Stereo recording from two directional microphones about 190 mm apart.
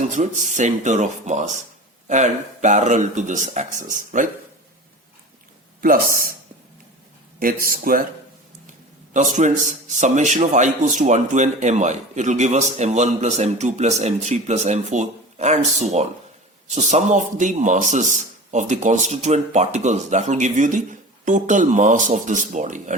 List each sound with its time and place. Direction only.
0.0 s a man's voice: 40° right (ahead or behind)
5.8 s a man's voice: 50° right (ahead or behind)
7.3 s a man's voice: 50° right (ahead or behind)
9.1 s a man's voice: 40° right (ahead or behind)